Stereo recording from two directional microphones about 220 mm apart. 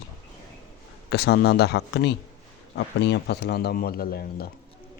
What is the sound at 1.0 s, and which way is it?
Speech, 45° left (ahead or behind).